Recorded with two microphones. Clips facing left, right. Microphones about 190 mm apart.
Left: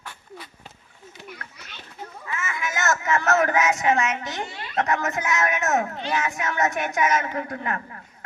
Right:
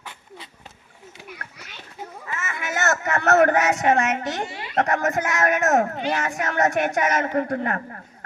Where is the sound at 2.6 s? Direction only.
65° right (ahead or behind).